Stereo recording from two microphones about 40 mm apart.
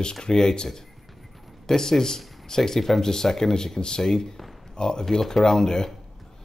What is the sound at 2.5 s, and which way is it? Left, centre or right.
Speech, centre.